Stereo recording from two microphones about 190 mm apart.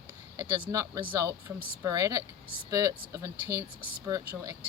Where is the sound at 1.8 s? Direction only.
15° right (ahead or behind).